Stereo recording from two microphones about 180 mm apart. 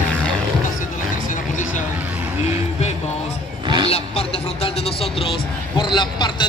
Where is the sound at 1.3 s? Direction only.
45° left (ahead or behind).